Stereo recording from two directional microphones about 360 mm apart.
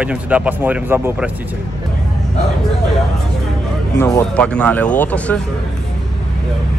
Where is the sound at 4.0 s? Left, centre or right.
Centre.